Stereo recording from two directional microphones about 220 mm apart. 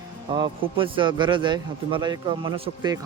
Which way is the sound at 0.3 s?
20° right (ahead or behind).